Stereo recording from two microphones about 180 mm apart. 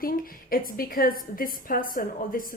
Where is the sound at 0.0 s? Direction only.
50° left (ahead or behind).